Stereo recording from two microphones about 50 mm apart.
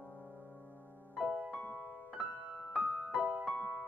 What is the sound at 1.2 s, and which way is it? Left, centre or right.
Music, right.